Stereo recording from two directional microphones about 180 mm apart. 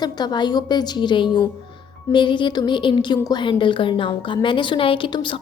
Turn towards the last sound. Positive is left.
turn(degrees=30)  # may be behind; listen again after turning